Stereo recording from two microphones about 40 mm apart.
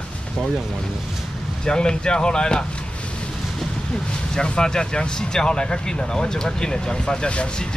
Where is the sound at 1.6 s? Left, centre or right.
Left.